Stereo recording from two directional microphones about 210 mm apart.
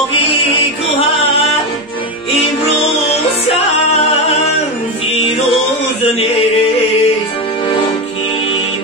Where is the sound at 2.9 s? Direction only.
30° left (ahead or behind).